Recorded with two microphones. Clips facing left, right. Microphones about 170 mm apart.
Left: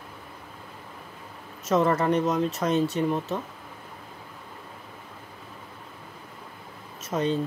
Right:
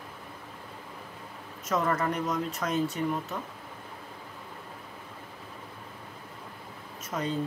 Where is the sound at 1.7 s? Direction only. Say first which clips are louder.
Left 6 dB; 25° left (ahead or behind).